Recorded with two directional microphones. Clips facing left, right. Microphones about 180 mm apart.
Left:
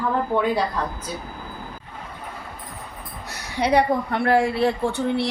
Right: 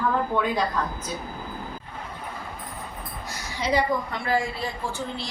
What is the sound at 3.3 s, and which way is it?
A woman's voice, 65° left (ahead or behind).